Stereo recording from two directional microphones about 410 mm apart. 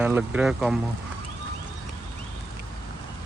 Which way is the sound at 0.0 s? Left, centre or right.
Centre.